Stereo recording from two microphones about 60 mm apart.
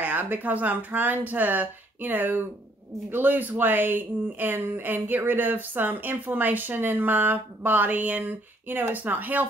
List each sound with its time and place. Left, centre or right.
0.0 s speech: right